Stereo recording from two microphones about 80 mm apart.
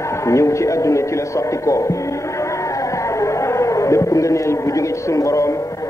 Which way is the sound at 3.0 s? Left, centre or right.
Left.